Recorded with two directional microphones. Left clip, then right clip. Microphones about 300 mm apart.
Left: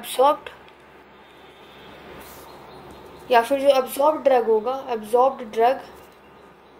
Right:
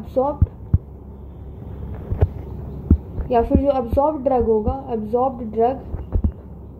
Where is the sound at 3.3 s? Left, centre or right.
Left.